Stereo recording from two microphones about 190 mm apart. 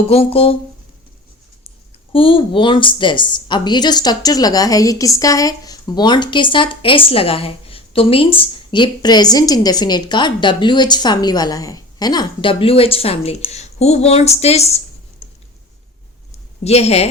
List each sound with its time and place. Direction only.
0.1 s speech: 30° left (ahead or behind)
2.1 s a woman's voice: 30° left (ahead or behind)
16.6 s speech: 35° left (ahead or behind)